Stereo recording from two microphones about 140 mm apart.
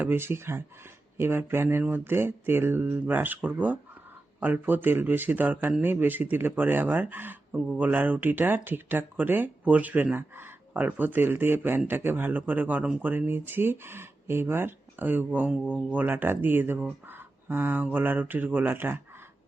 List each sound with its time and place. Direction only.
0.0 s speech: 15° right (ahead or behind)